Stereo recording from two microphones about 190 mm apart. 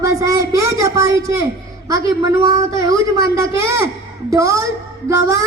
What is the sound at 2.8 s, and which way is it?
Speech, 20° right (ahead or behind).